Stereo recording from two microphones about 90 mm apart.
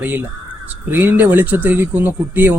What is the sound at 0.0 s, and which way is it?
Speech, 20° right (ahead or behind).